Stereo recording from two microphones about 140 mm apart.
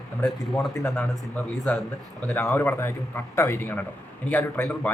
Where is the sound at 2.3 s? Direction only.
20° left (ahead or behind).